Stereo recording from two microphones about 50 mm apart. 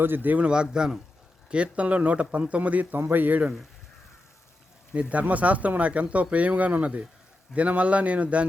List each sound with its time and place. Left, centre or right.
0.0 s a man's voice: right
0.3 s speech: centre
3.0 s speech: right
4.9 s speech: right